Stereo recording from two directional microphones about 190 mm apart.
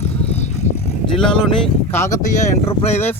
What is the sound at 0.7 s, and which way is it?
Vehicle, 40° left (ahead or behind).